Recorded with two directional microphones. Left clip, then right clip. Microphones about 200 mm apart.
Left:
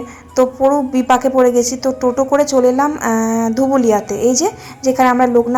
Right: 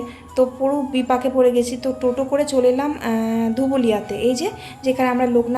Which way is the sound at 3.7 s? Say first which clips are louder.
Left 6 dB; 25° left (ahead or behind).